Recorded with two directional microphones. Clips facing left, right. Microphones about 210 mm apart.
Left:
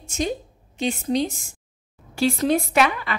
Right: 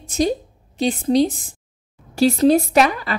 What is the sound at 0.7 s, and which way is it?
A woman's voice, 35° right (ahead or behind).